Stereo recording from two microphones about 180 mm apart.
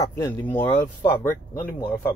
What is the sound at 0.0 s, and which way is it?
A man's voice, 15° left (ahead or behind).